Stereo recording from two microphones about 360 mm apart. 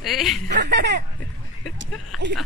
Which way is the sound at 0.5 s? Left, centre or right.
Right.